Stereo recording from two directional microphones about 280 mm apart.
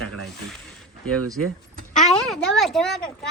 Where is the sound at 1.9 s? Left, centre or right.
Left.